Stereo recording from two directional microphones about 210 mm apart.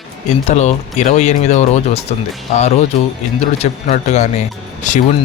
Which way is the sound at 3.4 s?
35° left (ahead or behind).